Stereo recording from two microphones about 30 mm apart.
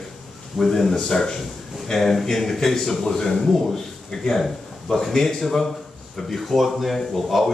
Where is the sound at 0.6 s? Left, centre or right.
Centre.